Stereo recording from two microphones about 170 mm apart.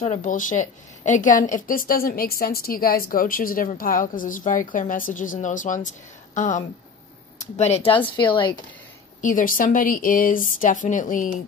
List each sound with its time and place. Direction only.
0.0 s a woman's voice: 45° left (ahead or behind); by 8.5 s 30° left (ahead or behind)
9.2 s a woman's voice: 50° left (ahead or behind)